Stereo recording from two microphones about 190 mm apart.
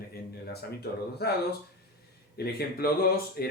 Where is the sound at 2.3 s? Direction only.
55° left (ahead or behind).